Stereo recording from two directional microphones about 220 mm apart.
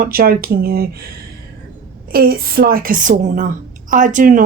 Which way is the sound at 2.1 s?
40° right (ahead or behind).